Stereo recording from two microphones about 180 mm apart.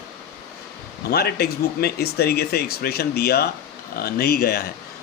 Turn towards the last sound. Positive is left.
turn(degrees=60)  # may be behind; listen again after turning